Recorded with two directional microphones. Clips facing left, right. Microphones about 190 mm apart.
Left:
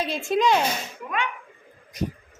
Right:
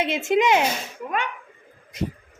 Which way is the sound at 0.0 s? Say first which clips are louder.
Right 2 dB; 20° right (ahead or behind).